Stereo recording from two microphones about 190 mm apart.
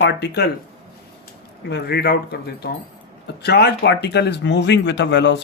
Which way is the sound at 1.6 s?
60° left (ahead or behind).